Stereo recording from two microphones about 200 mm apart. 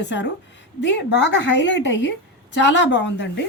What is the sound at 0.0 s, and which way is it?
A woman's voice, 60° left (ahead or behind).